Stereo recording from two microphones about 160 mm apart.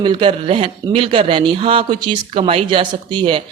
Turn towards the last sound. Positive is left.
turn(degrees=-30)  # may be behind; listen again after turning